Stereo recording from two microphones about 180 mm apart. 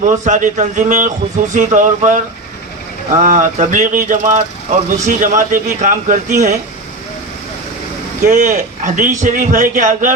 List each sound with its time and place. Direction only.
0.3 s speech: 45° right (ahead or behind)
8.3 s speech: 45° right (ahead or behind)